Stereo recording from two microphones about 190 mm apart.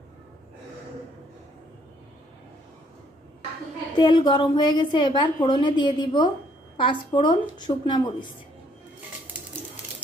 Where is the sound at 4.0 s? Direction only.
25° left (ahead or behind).